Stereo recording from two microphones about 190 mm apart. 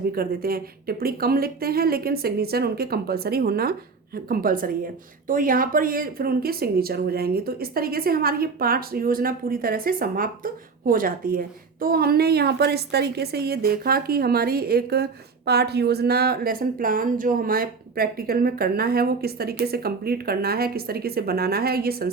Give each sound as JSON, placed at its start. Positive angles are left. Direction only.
{"t": 0.1, "sound": "speech", "side_deg": -50}